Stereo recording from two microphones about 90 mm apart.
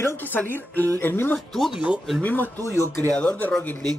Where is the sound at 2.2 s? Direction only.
20° left (ahead or behind).